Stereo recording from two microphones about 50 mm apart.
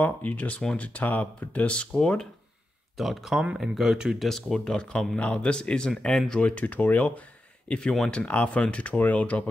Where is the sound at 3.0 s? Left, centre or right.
Centre.